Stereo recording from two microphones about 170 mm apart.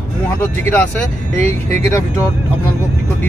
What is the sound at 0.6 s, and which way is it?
Speech, 10° left (ahead or behind).